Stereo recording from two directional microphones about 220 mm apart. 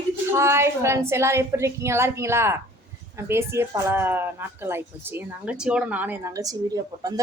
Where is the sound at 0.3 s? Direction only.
10° right (ahead or behind).